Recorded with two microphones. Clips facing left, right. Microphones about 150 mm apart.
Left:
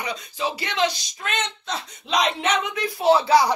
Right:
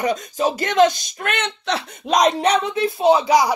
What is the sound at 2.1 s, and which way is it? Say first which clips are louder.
Speech: right 6 dB; 45° right (ahead or behind).